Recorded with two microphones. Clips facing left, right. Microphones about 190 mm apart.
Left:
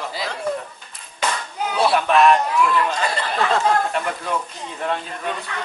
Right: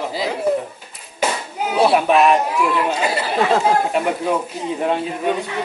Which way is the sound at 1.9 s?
5° right (ahead or behind).